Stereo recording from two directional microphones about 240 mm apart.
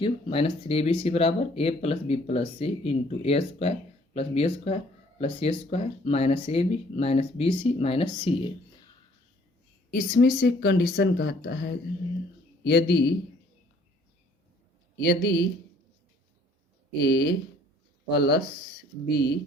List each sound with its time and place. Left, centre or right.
0.0 s speech: left
9.9 s speech: left
14.9 s speech: left
17.0 s speech: left